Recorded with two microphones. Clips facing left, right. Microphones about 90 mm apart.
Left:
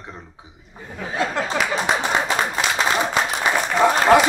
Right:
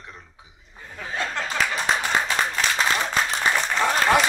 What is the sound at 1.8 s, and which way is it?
Clapping, 20° left (ahead or behind).